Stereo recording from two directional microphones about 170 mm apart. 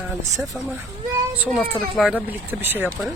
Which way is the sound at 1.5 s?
Centre (ahead or behind).